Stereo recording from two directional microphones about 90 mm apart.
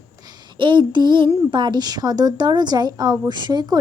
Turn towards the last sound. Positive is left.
turn(degrees=-55)  # may be behind; listen again after turning